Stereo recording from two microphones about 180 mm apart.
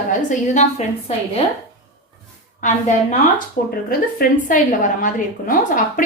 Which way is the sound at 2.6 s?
45° left (ahead or behind).